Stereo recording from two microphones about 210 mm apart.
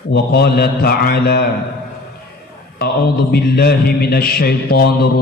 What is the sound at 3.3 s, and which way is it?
Mantra, 50° left (ahead or behind).